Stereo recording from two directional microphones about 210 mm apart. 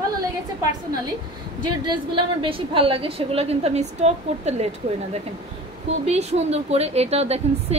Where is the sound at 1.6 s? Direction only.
20° right (ahead or behind).